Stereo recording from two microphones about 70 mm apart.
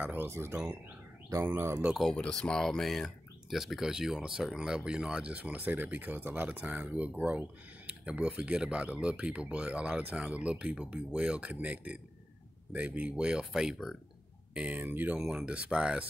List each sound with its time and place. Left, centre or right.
0.0 s speech: right
0.3 s speech: right
2.0 s speech: centre
13.1 s speech: centre
14.5 s speech: centre
15.1 s speech: centre